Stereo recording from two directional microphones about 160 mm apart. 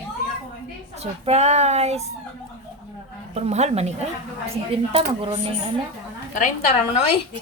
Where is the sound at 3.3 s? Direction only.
45° right (ahead or behind).